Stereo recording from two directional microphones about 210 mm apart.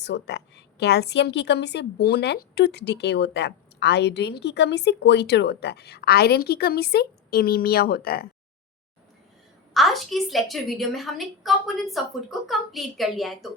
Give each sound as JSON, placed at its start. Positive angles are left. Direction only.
{"t": 0.0, "sound": "a woman's voice", "side_deg": 55}
{"t": 9.7, "sound": "a woman's voice", "side_deg": 0}